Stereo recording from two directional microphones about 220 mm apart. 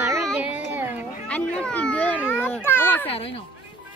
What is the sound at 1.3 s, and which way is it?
A child's voice, 5° left (ahead or behind).